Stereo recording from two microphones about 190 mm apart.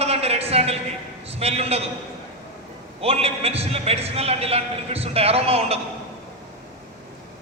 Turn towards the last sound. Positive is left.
turn(degrees=-30)  # may be behind; listen again after turning